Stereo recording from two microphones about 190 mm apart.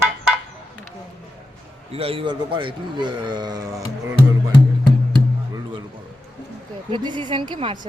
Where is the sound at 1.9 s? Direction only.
30° right (ahead or behind).